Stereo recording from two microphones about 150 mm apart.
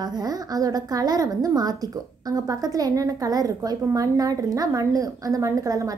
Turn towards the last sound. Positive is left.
turn(degrees=-25)  # may be behind; listen again after turning